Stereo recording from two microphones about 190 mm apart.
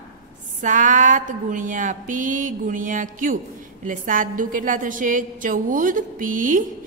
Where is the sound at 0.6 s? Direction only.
40° right (ahead or behind).